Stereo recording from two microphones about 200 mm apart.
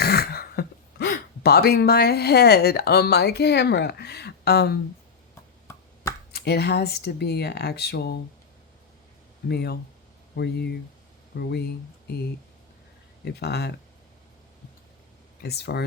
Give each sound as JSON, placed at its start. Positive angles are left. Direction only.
{"t": 0.0, "sound": "speech", "side_deg": 50}
{"t": 5.6, "sound": "finger snapping", "side_deg": 15}
{"t": 6.3, "sound": "speech", "side_deg": 55}
{"t": 9.5, "sound": "speech", "side_deg": 55}
{"t": 13.4, "sound": "speech", "side_deg": 55}
{"t": 15.4, "sound": "speech", "side_deg": 55}